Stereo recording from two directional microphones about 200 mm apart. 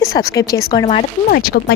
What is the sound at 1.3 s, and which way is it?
Speech, 45° left (ahead or behind).